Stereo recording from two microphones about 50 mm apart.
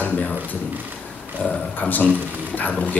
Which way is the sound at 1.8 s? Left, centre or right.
Left.